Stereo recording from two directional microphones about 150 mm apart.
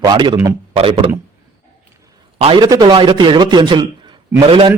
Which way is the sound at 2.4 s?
40° right (ahead or behind).